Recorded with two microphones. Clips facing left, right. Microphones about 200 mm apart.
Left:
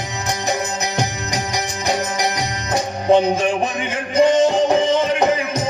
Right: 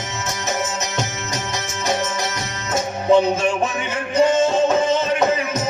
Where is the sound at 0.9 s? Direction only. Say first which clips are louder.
Left 3 dB; 15° left (ahead or behind).